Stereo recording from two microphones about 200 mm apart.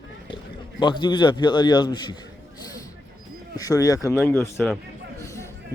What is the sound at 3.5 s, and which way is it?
Speech, 15° left (ahead or behind).